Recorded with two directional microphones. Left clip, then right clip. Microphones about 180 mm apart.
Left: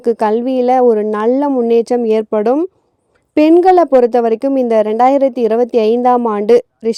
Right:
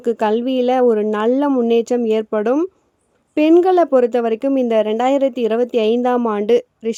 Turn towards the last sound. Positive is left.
turn(degrees=40)  # may be behind; listen again after turning